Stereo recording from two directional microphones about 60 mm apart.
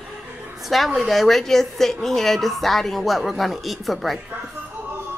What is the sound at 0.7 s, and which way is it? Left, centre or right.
A woman's voice, centre.